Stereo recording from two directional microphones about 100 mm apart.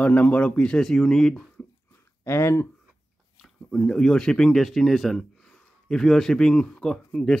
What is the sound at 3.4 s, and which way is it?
Speech, 5° left (ahead or behind).